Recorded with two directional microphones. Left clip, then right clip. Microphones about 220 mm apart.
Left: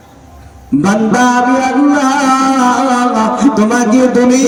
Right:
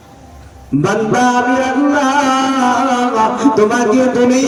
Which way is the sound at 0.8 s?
35° left (ahead or behind).